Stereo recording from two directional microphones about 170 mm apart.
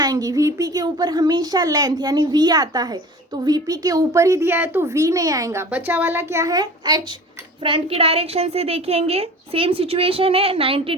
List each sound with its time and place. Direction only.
0.0 s a woman's voice: 20° right (ahead or behind)